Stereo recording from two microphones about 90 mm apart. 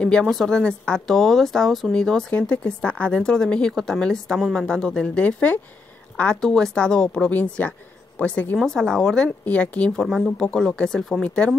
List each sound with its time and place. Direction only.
0.0 s speech: 5° left (ahead or behind)
8.5 s speech: 5° left (ahead or behind)
10.0 s speech: centre (ahead or behind)